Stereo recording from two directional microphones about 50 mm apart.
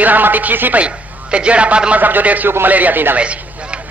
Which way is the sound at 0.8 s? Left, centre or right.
Right.